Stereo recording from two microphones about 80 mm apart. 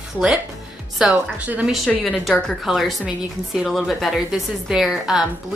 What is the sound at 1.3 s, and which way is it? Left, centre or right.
Speech, centre.